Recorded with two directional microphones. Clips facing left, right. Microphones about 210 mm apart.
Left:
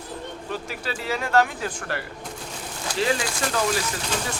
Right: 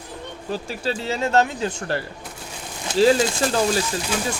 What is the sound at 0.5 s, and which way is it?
Speech, 30° right (ahead or behind).